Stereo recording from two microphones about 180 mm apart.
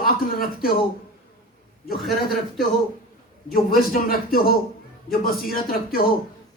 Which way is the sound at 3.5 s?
55° left (ahead or behind).